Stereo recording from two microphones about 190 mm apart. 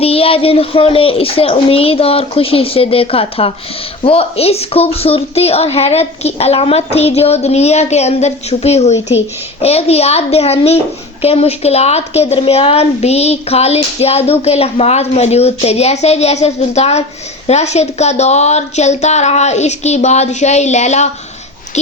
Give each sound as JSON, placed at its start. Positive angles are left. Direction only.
{"t": 0.0, "sound": "a woman's voice", "side_deg": 30}